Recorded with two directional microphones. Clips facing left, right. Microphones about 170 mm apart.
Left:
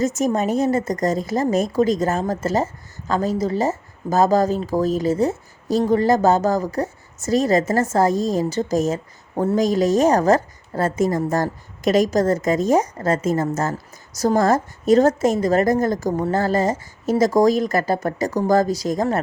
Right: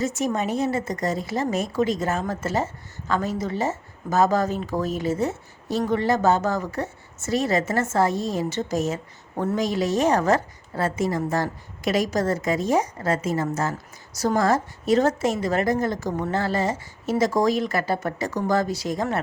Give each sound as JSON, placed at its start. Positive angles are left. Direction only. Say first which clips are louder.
{"t": 0.0, "sound": "a woman's voice", "louder": "left 5 dB", "side_deg": 45}